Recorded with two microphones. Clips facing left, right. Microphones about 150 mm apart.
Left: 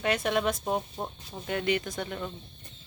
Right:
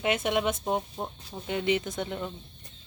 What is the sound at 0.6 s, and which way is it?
Speech, 5° right (ahead or behind).